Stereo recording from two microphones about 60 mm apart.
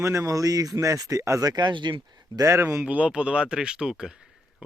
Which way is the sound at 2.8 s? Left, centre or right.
Centre.